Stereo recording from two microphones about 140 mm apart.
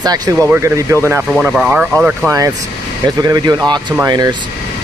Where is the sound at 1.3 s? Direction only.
5° right (ahead or behind).